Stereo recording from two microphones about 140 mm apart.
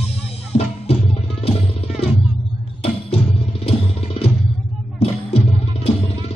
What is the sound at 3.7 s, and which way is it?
Music, 45° left (ahead or behind).